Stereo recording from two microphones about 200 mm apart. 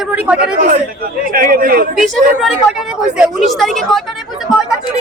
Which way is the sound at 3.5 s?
Centre (ahead or behind).